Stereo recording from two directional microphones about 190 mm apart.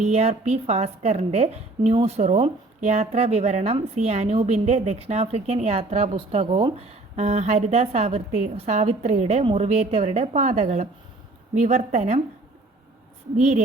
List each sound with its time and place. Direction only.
0.0 s a woman's voice: 35° right (ahead or behind)
13.3 s a woman's voice: 35° right (ahead or behind)